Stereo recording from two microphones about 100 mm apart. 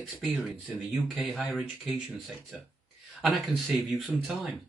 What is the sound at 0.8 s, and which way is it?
Speech, centre (ahead or behind).